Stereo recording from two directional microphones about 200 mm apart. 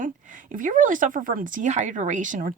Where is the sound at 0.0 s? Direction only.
40° right (ahead or behind).